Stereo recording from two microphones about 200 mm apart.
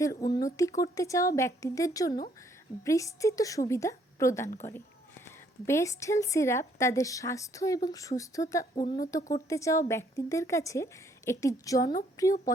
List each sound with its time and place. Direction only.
0.0 s a woman's voice: 15° left (ahead or behind)
5.6 s a woman's voice: 15° left (ahead or behind)